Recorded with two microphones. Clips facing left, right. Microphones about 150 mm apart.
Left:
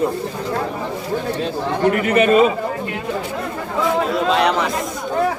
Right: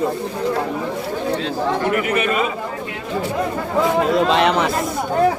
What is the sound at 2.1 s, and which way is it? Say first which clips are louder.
Speech: left 6 dB; 35° left (ahead or behind).